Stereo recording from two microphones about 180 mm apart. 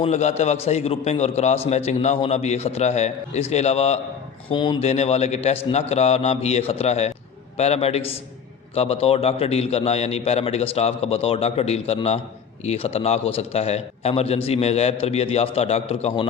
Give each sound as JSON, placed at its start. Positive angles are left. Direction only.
{"t": 0.0, "sound": "a man's voice", "side_deg": 35}
{"t": 4.4, "sound": "a man's voice", "side_deg": 25}